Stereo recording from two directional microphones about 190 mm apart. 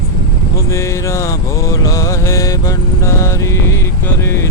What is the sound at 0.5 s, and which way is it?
Mantra, 15° left (ahead or behind).